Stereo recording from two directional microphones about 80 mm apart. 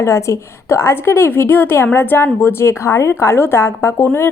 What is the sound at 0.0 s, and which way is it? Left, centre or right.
A woman's voice, left.